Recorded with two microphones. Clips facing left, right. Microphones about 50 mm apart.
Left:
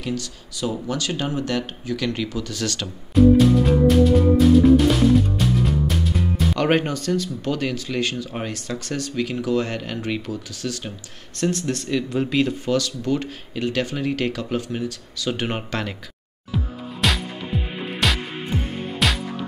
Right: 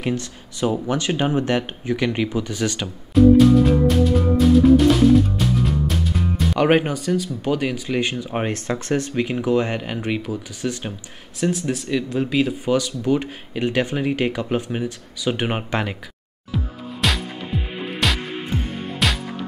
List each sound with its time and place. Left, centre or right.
0.0 s speech: right
3.2 s music: centre
6.6 s speech: centre
11.3 s speech: centre
12.6 s speech: centre
16.5 s music: centre